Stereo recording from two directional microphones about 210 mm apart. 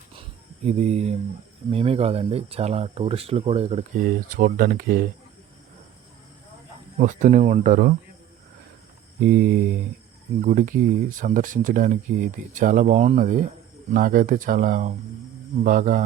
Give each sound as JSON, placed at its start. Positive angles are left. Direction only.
{"t": 0.2, "sound": "a sound", "side_deg": -30}
{"t": 1.7, "sound": "speech", "side_deg": -25}
{"t": 4.0, "sound": "speech", "side_deg": -40}
{"t": 7.0, "sound": "speech", "side_deg": -35}
{"t": 9.2, "sound": "speech", "side_deg": -45}